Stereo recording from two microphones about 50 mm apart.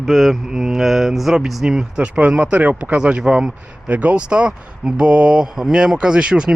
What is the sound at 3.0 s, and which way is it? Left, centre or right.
Speech, centre.